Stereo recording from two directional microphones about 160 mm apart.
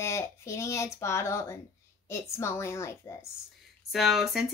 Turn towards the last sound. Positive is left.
turn(degrees=0)  # may be behind; listen again after turning